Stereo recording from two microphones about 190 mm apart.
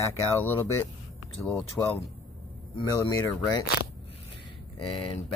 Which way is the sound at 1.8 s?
10° left (ahead or behind).